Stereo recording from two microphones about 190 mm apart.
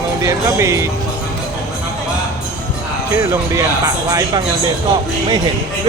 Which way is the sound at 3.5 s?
15° right (ahead or behind).